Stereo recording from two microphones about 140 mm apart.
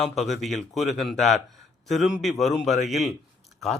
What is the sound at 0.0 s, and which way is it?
Speech, centre (ahead or behind).